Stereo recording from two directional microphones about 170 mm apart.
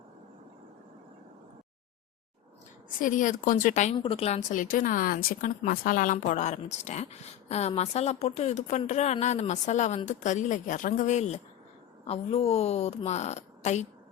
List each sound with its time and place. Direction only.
3.0 s speech: 50° left (ahead or behind)
3.9 s speech: 30° left (ahead or behind)